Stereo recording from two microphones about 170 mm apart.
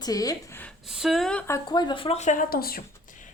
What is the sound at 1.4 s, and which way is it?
Speech, 20° left (ahead or behind).